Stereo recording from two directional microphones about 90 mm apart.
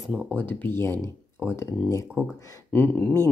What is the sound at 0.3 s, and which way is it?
Speech, 20° left (ahead or behind).